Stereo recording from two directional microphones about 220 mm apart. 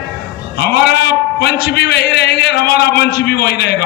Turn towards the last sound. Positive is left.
turn(degrees=50)  # may be behind; listen again after turning